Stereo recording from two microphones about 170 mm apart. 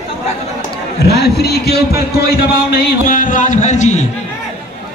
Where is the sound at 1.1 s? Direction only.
70° left (ahead or behind).